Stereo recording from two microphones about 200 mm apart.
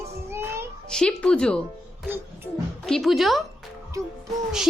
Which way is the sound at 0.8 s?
5° left (ahead or behind).